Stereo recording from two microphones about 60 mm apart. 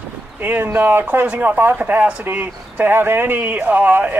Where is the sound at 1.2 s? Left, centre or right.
Right.